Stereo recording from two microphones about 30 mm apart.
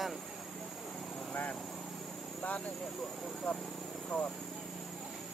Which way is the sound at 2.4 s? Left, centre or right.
Left.